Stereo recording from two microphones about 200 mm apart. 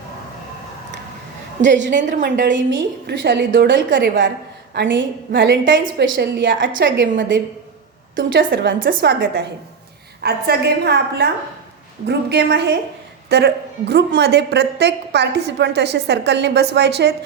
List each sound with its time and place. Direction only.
1.6 s a woman's voice: 65° right (ahead or behind)
2.0 s a woman's voice: 40° right (ahead or behind)
2.2 s a woman's voice: 60° right (ahead or behind)
8.1 s a woman's voice: 70° right (ahead or behind)